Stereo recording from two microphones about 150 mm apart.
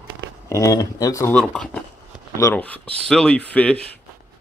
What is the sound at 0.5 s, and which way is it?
Speech, 20° left (ahead or behind).